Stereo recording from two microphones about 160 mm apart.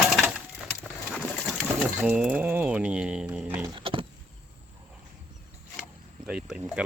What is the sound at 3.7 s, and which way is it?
Vehicle, 35° right (ahead or behind).